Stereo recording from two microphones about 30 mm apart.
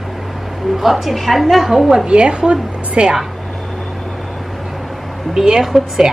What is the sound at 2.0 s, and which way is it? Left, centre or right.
A woman's voice, right.